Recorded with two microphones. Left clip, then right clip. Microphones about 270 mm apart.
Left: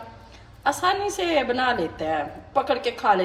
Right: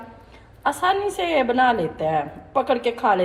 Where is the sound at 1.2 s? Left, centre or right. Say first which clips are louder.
Right 4 dB; right.